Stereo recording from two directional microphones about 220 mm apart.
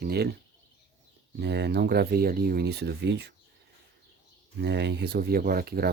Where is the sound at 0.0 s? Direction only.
45° right (ahead or behind).